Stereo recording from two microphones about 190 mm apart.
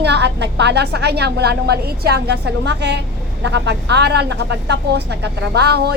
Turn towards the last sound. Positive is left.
turn(degrees=-60)  # may be behind; listen again after turning